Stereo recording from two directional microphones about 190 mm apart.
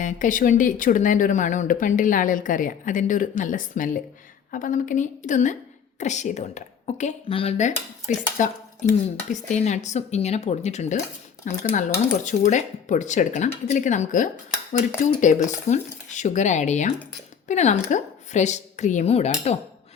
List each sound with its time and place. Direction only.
0.0 s speech: 45° left (ahead or behind)